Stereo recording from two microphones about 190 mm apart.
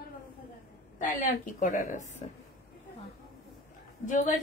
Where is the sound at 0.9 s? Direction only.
40° left (ahead or behind).